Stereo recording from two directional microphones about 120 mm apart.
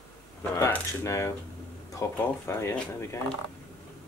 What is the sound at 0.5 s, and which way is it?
Speech, 25° left (ahead or behind).